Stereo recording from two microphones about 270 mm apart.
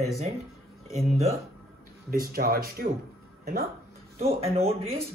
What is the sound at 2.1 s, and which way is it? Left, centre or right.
Speech, right.